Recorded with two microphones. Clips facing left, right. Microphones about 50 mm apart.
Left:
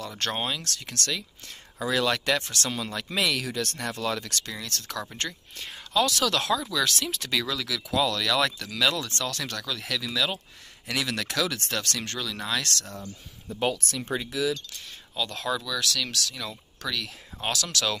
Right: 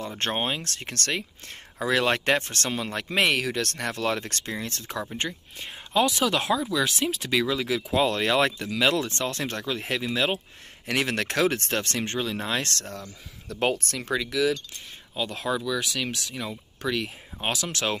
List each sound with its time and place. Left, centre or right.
0.0 s speech: right
13.5 s speech: right
15.1 s speech: centre